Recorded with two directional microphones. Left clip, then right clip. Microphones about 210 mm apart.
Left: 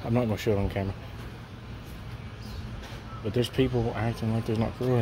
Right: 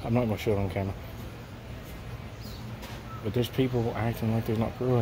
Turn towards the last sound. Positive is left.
turn(degrees=0)  # may be behind; listen again after turning